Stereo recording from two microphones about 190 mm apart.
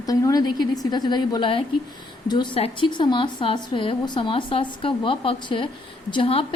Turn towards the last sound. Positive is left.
turn(degrees=30)  # may be behind; listen again after turning